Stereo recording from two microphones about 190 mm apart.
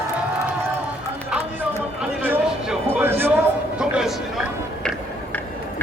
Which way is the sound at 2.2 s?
10° right (ahead or behind).